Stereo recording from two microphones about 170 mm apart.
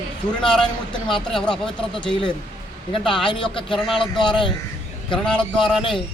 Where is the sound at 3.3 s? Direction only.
30° left (ahead or behind).